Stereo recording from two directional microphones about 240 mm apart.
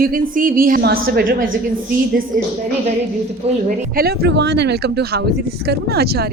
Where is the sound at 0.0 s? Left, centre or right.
Right.